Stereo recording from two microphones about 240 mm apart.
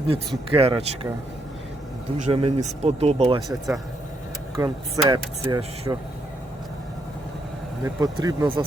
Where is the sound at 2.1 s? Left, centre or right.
Right.